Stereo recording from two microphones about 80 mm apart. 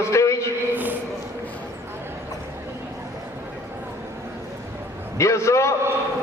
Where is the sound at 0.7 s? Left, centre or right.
Right.